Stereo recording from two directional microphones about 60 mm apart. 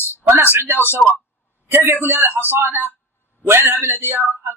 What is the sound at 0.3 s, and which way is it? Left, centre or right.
A man's voice, right.